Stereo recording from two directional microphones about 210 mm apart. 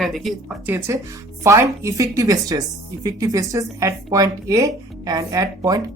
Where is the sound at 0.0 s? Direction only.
Centre (ahead or behind).